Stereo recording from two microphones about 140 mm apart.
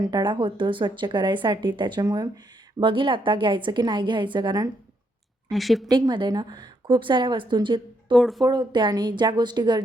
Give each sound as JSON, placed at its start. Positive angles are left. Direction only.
{"t": 0.1, "sound": "speech", "side_deg": -35}
{"t": 2.8, "sound": "speech", "side_deg": -35}
{"t": 5.5, "sound": "a woman's voice", "side_deg": 0}
{"t": 5.9, "sound": "speech", "side_deg": -30}
{"t": 8.1, "sound": "a woman's voice", "side_deg": 0}
{"t": 8.4, "sound": "speech", "side_deg": -30}